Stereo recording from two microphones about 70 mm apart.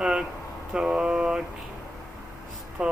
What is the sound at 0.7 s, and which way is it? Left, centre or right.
Mantra, centre.